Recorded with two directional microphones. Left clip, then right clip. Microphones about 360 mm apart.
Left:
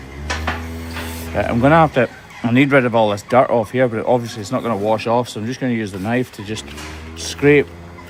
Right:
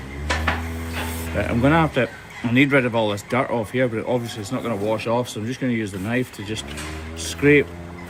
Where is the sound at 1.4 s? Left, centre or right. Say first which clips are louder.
Left 6 dB; left.